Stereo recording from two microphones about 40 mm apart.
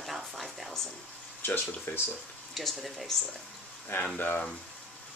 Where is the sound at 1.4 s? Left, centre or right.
Left.